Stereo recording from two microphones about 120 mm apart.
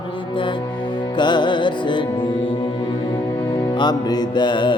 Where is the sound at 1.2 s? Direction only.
40° left (ahead or behind).